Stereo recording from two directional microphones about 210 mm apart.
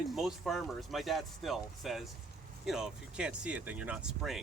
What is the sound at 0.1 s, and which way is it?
Speech, centre (ahead or behind).